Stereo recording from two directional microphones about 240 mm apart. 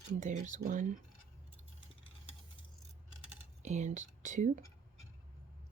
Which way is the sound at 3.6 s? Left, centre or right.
Right.